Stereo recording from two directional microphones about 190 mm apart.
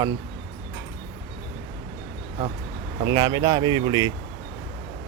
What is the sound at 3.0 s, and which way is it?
Speech, 20° right (ahead or behind).